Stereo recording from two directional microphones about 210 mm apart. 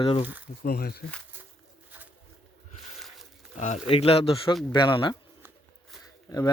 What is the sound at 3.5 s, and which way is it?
Speech, 35° left (ahead or behind).